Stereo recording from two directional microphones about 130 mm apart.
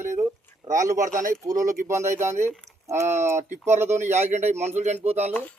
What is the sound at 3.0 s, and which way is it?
A man's voice, 65° right (ahead or behind).